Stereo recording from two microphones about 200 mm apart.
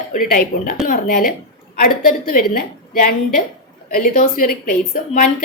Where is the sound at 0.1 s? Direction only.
45° left (ahead or behind).